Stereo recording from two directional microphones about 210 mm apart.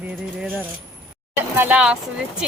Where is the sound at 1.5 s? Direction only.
10° right (ahead or behind).